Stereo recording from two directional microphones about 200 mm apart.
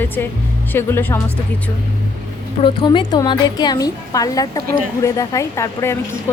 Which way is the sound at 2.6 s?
25° left (ahead or behind).